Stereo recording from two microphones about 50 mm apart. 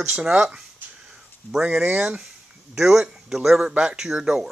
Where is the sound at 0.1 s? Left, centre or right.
Centre.